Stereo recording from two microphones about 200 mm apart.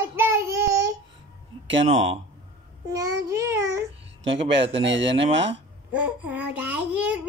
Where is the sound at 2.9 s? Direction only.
15° right (ahead or behind).